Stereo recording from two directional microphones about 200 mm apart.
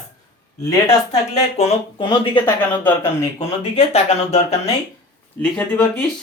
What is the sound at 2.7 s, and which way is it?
Speech, 10° left (ahead or behind).